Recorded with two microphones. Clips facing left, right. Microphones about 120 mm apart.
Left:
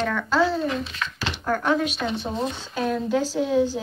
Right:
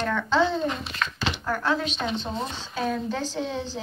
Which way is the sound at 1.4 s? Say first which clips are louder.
Left 5 dB; 15° left (ahead or behind).